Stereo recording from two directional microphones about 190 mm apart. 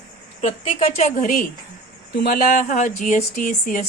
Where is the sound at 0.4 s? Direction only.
30° left (ahead or behind).